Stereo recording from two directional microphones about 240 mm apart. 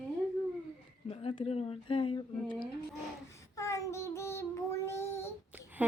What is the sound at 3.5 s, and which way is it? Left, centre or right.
Child singing, centre.